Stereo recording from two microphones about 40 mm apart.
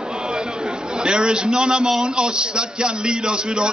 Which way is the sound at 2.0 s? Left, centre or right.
Right.